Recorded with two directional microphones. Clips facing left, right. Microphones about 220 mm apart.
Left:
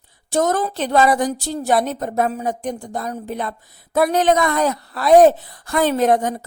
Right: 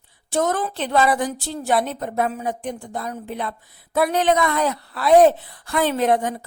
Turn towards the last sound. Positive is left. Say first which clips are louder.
# left 3 dB
turn(degrees=45)  # may be behind; listen again after turning